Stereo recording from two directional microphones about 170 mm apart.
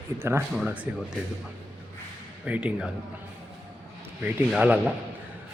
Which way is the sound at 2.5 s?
5° right (ahead or behind).